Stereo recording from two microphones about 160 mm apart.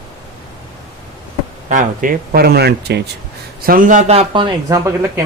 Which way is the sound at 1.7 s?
60° right (ahead or behind).